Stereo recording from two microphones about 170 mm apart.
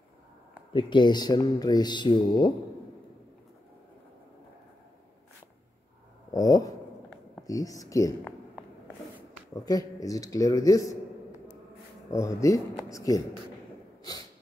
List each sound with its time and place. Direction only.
0.7 s speech: 25° left (ahead or behind)
6.3 s speech: 20° left (ahead or behind)
9.7 s speech: 20° left (ahead or behind)
12.1 s speech: 15° left (ahead or behind)